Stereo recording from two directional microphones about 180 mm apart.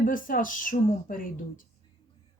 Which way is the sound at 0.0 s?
50° left (ahead or behind).